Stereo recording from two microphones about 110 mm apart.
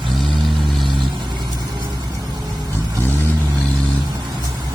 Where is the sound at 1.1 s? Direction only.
40° right (ahead or behind).